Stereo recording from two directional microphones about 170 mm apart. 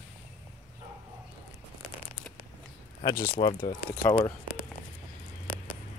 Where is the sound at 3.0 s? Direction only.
20° left (ahead or behind).